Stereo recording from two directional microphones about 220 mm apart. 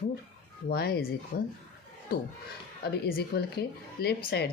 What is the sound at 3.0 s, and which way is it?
A woman's voice, 45° left (ahead or behind).